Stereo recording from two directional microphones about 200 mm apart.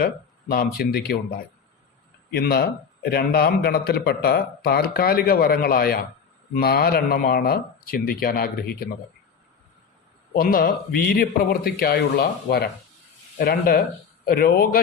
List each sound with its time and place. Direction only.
0.5 s a man's voice: 45° left (ahead or behind)
10.3 s a man's voice: 45° left (ahead or behind)